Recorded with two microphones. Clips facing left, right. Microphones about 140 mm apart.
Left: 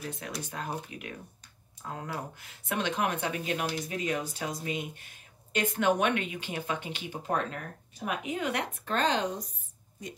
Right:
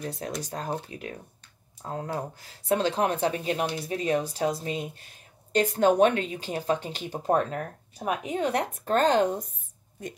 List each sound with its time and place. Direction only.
0.0 s speech: 35° right (ahead or behind)